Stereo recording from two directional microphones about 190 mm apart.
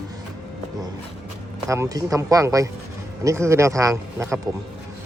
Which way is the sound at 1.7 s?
15° right (ahead or behind).